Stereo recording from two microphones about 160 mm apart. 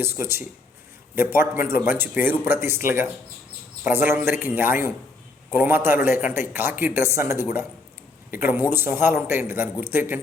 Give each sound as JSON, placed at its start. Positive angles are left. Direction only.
{"t": 0.0, "sound": "speech", "side_deg": -15}